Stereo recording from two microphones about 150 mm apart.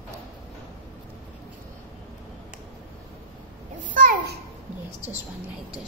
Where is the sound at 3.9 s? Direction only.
70° right (ahead or behind).